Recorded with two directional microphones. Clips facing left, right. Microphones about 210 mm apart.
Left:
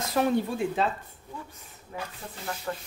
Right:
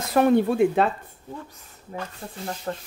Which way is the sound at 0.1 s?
60° right (ahead or behind).